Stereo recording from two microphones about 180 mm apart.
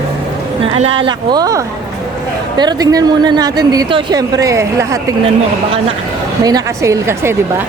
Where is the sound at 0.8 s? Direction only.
30° right (ahead or behind).